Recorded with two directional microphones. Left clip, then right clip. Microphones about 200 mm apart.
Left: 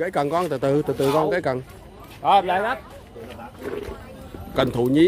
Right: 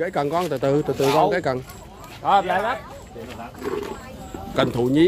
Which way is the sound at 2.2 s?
55° left (ahead or behind).